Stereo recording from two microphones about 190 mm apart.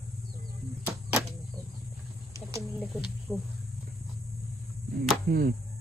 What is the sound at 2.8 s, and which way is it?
Speech, 5° left (ahead or behind).